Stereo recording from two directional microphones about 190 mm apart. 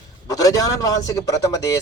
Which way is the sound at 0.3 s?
20° left (ahead or behind).